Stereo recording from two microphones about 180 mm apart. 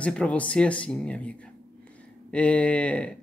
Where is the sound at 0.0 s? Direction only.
5° left (ahead or behind).